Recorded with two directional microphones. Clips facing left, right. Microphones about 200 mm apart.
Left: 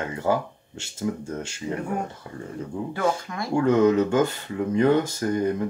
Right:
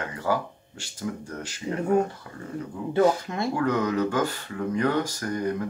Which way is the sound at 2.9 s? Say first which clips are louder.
Right 6 dB; 25° right (ahead or behind).